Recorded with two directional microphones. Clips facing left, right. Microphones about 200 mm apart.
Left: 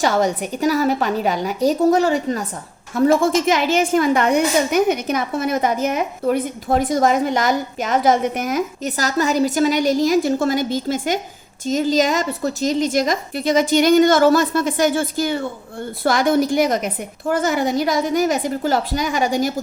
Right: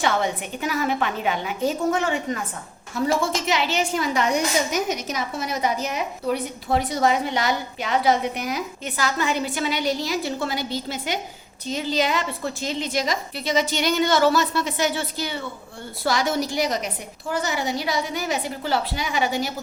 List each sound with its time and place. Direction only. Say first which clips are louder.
0.0 s a woman's voice: left 5 dB; 40° left (ahead or behind)
2.9 s a woman's voice: left 8 dB; 55° left (ahead or behind)